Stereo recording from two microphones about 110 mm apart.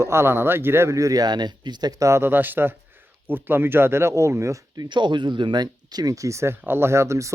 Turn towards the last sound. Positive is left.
turn(degrees=-25)  # may be behind; listen again after turning